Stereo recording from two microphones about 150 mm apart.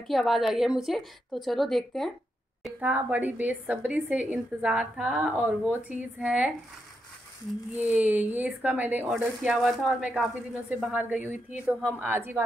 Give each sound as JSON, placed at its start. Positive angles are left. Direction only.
{"t": 0.1, "sound": "a woman's voice", "side_deg": 0}
{"t": 2.6, "sound": "a woman's voice", "side_deg": -10}
{"t": 7.9, "sound": "a woman's voice", "side_deg": -10}